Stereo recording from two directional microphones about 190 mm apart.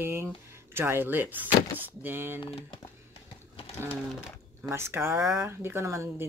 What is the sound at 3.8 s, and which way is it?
Speech, 15° right (ahead or behind).